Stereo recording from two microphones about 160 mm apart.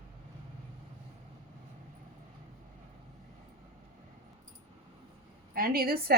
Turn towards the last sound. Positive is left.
turn(degrees=-70)  # may be behind; listen again after turning